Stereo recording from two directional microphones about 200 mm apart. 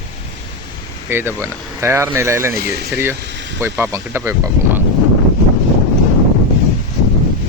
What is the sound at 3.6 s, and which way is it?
Speech, 10° right (ahead or behind).